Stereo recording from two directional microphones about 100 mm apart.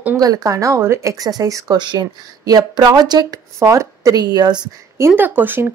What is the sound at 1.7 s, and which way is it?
Speech, 45° right (ahead or behind).